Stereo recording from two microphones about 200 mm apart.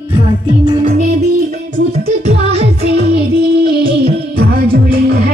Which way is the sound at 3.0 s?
50° right (ahead or behind).